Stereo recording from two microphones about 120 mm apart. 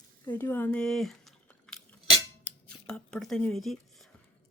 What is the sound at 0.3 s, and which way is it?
Speech, 20° left (ahead or behind).